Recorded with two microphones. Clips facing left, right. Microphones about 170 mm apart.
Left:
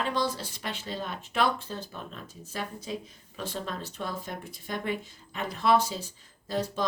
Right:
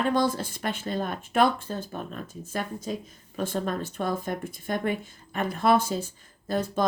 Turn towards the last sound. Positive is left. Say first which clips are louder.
# right 4 dB
turn(degrees=-50)  # may be behind; listen again after turning